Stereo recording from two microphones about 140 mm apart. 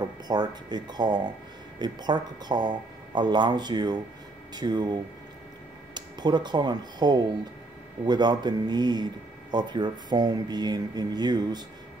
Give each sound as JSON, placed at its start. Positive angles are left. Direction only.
{"t": 0.3, "sound": "speech", "side_deg": -30}
{"t": 5.9, "sound": "speech", "side_deg": -30}